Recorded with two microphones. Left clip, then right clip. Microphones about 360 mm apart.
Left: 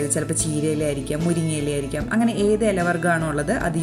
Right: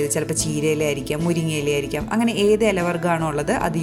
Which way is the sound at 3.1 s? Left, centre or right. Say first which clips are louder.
Right 1 dB; right.